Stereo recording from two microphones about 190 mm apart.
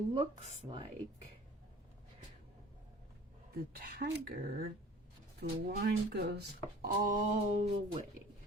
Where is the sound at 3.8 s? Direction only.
50° right (ahead or behind).